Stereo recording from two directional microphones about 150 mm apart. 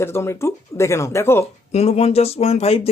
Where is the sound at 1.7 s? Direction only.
45° left (ahead or behind).